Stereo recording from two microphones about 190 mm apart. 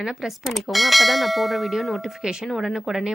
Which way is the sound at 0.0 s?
Centre (ahead or behind).